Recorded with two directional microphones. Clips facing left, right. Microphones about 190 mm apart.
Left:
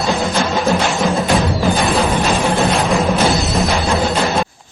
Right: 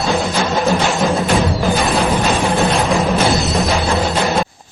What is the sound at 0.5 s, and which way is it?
Music, centre (ahead or behind).